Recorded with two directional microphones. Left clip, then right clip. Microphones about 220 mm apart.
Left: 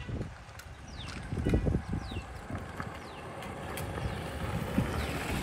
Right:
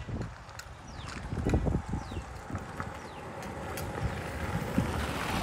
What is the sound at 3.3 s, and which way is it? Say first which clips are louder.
Vehicle: right 1 dB; centre (ahead or behind).